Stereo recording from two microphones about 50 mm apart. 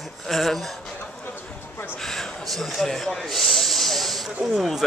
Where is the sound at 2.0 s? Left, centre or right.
Centre.